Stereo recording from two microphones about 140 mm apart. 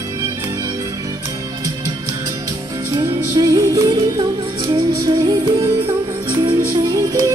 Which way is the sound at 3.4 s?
25° right (ahead or behind).